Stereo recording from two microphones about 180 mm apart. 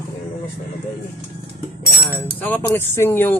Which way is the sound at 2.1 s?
10° left (ahead or behind).